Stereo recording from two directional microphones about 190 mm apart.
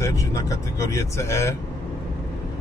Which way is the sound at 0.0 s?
15° left (ahead or behind).